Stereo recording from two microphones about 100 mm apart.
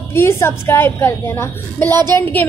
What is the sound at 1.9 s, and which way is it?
Speech, 40° right (ahead or behind).